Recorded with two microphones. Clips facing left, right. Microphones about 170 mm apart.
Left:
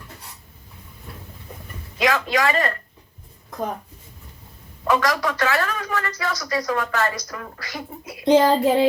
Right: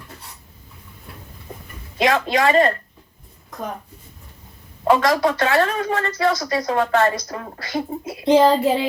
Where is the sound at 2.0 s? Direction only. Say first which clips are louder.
Right 3 dB; 30° right (ahead or behind).